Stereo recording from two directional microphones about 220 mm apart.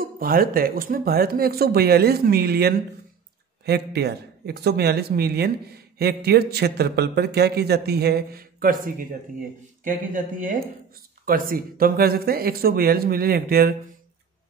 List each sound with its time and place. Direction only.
0.0 s speech: 40° right (ahead or behind)